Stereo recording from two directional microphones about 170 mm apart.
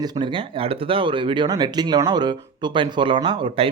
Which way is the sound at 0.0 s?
30° right (ahead or behind).